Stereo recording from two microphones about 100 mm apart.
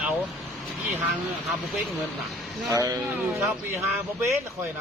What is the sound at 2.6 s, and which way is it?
Speech, 35° right (ahead or behind).